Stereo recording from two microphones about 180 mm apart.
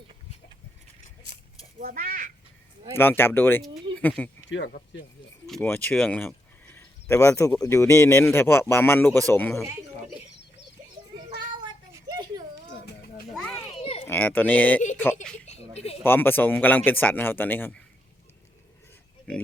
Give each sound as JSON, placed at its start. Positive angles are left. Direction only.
{"t": 1.8, "sound": "speech", "side_deg": -55}
{"t": 2.9, "sound": "speech", "side_deg": 10}
{"t": 3.9, "sound": "a sound", "side_deg": -25}
{"t": 4.4, "sound": "speech", "side_deg": 90}
{"t": 5.6, "sound": "speech", "side_deg": 10}
{"t": 11.3, "sound": "child singing", "side_deg": -25}
{"t": 13.3, "sound": "children playing", "side_deg": 5}
{"t": 13.6, "sound": "a sound", "side_deg": 30}
{"t": 14.1, "sound": "speech", "side_deg": 10}
{"t": 15.4, "sound": "a sound", "side_deg": 35}
{"t": 16.0, "sound": "speech", "side_deg": 10}